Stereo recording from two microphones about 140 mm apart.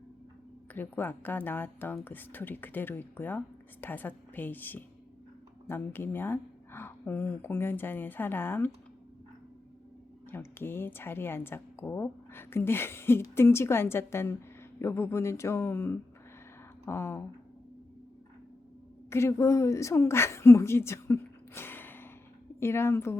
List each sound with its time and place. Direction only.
0.7 s speech: 15° left (ahead or behind)
10.3 s speech: 15° left (ahead or behind)
19.1 s a woman's voice: 20° left (ahead or behind)